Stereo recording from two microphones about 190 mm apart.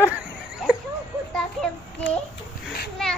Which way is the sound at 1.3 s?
5° left (ahead or behind).